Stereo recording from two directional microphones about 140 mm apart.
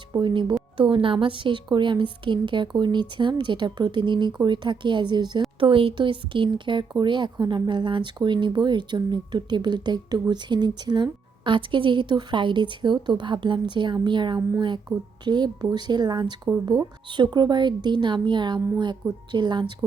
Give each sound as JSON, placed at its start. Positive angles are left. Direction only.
{"t": 0.1, "sound": "speech", "side_deg": -35}